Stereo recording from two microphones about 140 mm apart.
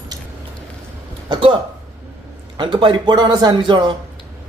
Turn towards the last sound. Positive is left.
turn(degrees=-35)  # may be behind; listen again after turning